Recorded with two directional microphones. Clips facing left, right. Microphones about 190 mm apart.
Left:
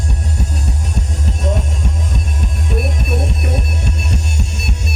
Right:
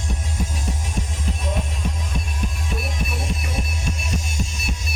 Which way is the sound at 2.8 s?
55° left (ahead or behind).